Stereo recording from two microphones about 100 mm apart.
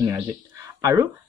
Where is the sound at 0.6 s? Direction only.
35° right (ahead or behind).